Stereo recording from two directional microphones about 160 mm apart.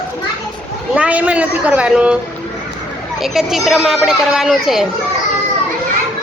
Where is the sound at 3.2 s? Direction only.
Centre (ahead or behind).